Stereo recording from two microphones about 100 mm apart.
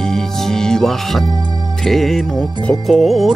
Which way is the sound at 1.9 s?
5° left (ahead or behind).